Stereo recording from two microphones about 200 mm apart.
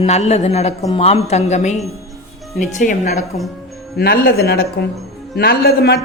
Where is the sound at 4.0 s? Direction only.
50° left (ahead or behind).